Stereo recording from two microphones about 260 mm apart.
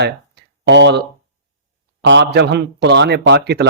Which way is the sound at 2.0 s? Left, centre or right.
Right.